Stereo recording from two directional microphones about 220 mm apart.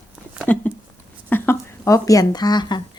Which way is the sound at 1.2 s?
10° left (ahead or behind).